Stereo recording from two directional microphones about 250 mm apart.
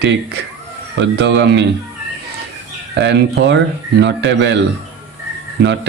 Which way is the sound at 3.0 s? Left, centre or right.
Right.